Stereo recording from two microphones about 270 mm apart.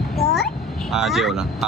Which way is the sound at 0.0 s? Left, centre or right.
Centre.